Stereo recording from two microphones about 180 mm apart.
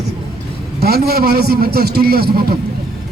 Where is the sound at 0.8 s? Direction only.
60° right (ahead or behind).